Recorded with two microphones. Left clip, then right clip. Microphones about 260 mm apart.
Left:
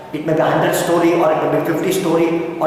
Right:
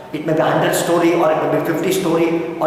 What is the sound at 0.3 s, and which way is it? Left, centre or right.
A man's voice, centre.